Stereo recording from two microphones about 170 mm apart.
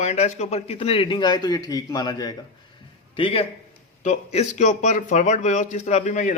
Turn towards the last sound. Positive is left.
turn(degrees=45)  # may be behind; listen again after turning